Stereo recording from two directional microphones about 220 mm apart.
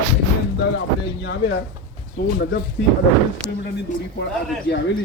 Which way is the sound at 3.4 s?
20° left (ahead or behind).